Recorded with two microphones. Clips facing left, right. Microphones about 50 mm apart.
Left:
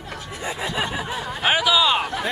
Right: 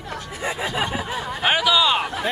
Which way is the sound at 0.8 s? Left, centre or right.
Centre.